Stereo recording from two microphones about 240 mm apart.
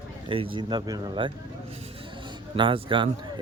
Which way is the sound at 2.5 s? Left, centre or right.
Right.